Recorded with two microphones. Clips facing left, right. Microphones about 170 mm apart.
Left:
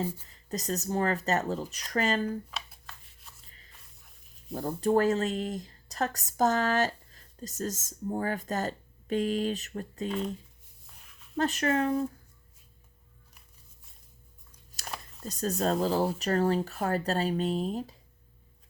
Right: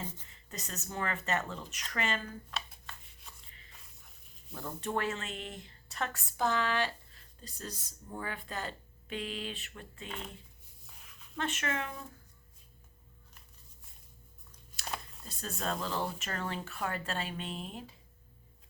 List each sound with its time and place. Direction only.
0.2 s speech: 35° left (ahead or behind)
2.5 s chopping: centre (ahead or behind)
4.5 s speech: 40° left (ahead or behind)
10.8 s music: centre (ahead or behind)
11.3 s speech: 35° left (ahead or behind)
14.8 s a sound: centre (ahead or behind)
15.2 s speech: 40° left (ahead or behind)